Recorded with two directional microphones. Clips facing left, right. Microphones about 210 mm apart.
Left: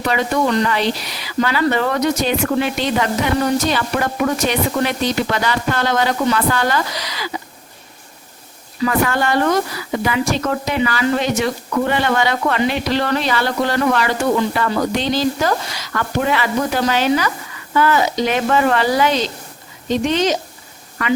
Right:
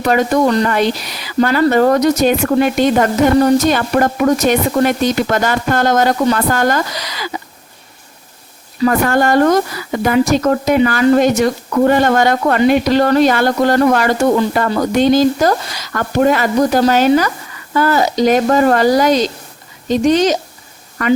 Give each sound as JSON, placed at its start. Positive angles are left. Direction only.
{"t": 0.1, "sound": "speech", "side_deg": -45}
{"t": 8.8, "sound": "speech", "side_deg": -45}